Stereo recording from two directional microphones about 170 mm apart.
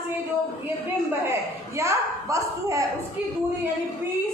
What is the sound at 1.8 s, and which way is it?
A man's voice, 15° right (ahead or behind).